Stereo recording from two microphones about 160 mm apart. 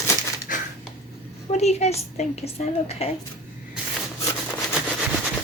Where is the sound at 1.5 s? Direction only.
45° left (ahead or behind).